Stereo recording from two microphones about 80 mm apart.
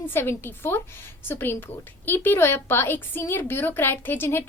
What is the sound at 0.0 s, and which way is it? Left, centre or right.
A woman's voice, left.